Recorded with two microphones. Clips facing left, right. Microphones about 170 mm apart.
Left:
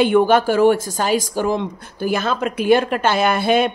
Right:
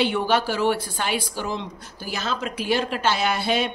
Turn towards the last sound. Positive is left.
turn(degrees=55)  # may be behind; listen again after turning